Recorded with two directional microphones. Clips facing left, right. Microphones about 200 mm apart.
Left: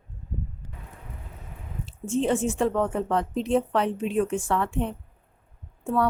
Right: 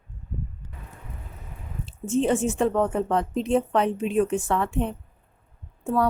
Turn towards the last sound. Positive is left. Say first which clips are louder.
# right 1 dB
turn(degrees=-20)  # may be behind; listen again after turning